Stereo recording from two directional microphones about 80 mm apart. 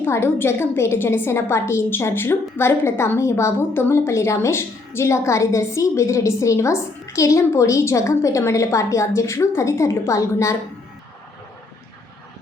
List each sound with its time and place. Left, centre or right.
0.0 s a woman's voice: left